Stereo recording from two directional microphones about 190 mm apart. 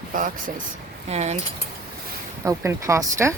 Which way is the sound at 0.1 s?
45° right (ahead or behind).